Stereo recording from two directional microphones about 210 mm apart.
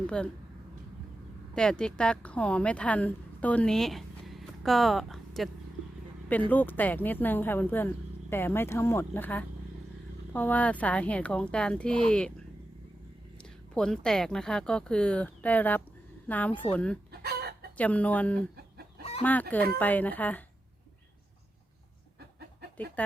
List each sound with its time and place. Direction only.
0.1 s speech: 5° left (ahead or behind)
1.5 s speech: 5° left (ahead or behind)
6.5 s speech: 10° left (ahead or behind)
13.4 s a woman's voice: 5° left (ahead or behind)
17.1 s chicken: 50° right (ahead or behind)
17.7 s speech: 5° left (ahead or behind)
23.0 s speech: 5° left (ahead or behind)